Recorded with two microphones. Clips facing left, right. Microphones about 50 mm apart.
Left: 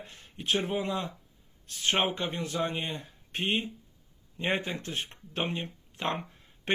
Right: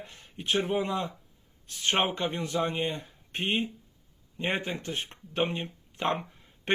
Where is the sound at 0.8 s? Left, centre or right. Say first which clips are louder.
Right 2 dB; right.